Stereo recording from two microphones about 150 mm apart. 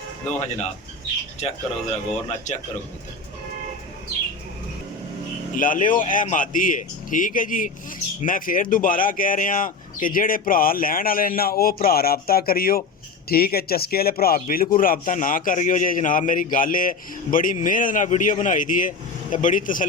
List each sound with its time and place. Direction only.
0.3 s speech: 45° left (ahead or behind)
2.2 s speech: 50° left (ahead or behind)
5.5 s speech: 65° left (ahead or behind)